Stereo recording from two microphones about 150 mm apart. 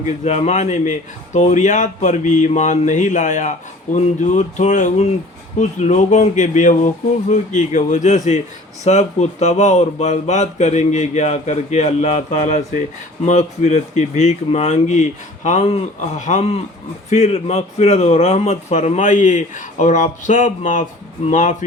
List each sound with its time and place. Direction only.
0.0 s speech: 50° left (ahead or behind)